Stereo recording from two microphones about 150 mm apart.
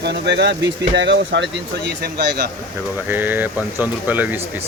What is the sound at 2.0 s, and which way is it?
Speech, 90° right.